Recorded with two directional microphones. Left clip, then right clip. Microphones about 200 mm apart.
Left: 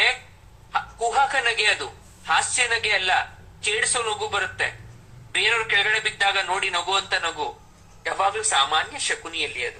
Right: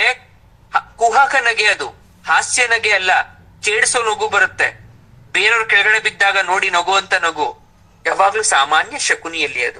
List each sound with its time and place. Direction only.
0.7 s a man's voice: 35° right (ahead or behind)